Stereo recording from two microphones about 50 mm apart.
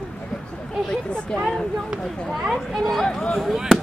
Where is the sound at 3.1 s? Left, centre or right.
Centre.